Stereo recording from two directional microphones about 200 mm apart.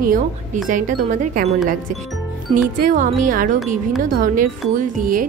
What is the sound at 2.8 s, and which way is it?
Speech, 40° right (ahead or behind).